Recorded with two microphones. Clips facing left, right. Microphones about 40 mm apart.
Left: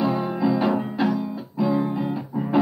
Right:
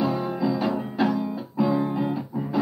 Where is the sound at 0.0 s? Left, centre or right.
Centre.